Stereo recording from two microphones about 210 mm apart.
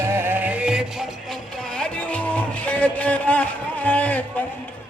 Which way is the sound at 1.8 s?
5° left (ahead or behind).